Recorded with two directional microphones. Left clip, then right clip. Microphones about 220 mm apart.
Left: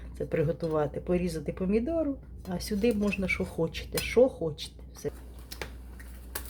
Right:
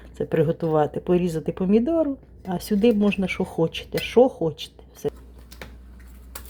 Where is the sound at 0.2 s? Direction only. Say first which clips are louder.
Right 7 dB; 25° right (ahead or behind).